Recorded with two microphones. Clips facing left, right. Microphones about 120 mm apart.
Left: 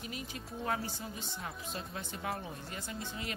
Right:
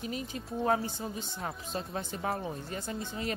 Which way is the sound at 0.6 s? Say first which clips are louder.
Right 7 dB; 30° right (ahead or behind).